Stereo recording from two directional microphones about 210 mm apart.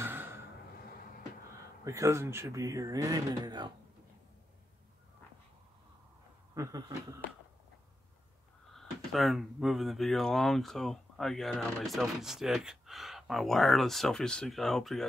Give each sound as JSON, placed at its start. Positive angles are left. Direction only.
{"t": 0.0, "sound": "a sound", "side_deg": -10}
{"t": 1.9, "sound": "speech", "side_deg": -15}
{"t": 6.5, "sound": "speech", "side_deg": -15}
{"t": 8.7, "sound": "speech", "side_deg": 0}